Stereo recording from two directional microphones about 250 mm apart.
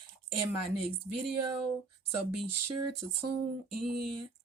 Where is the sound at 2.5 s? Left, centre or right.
Right.